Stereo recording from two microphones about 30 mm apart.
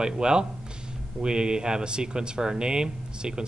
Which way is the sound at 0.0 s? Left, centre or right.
Right.